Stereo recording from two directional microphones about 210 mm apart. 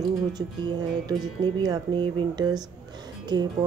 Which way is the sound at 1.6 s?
20° right (ahead or behind).